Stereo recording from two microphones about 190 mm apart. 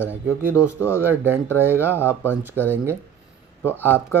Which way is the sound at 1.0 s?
10° right (ahead or behind).